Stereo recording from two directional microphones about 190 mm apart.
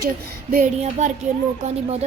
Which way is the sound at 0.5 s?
40° right (ahead or behind).